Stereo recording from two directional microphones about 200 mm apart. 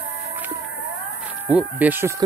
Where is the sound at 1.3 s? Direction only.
10° right (ahead or behind).